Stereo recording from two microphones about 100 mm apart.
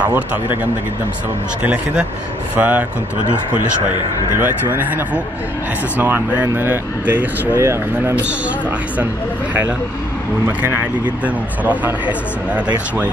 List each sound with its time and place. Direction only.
0.0 s speech: 15° right (ahead or behind)
1.6 s speech: 10° right (ahead or behind)
4.4 s speech: 20° right (ahead or behind)
8.2 s speech: 15° right (ahead or behind)